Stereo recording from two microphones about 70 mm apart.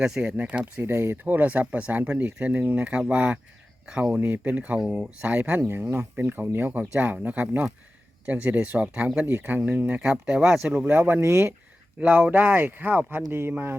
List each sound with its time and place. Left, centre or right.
0.2 s speech: right
0.6 s speech: right; by 10.7 s centre
10.7 s speech: right